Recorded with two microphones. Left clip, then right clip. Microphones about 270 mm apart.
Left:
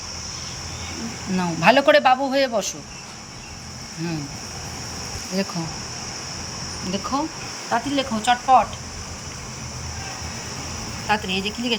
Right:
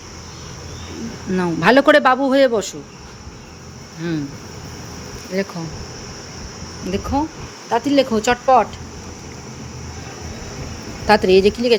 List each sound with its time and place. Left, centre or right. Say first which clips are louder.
1.4 s speech: right 3 dB; centre
4.0 s speech: right 6 dB; centre
5.3 s speech: right 4 dB; centre
7.1 s speech: right 4 dB; centre
11.1 s a woman's voice: right 11 dB; centre